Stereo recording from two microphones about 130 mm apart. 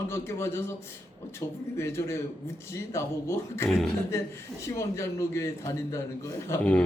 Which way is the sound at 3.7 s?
Centre (ahead or behind).